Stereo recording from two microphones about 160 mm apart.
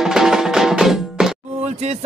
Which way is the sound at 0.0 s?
5° right (ahead or behind).